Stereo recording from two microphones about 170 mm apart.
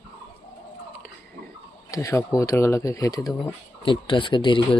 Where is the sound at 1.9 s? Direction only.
20° left (ahead or behind).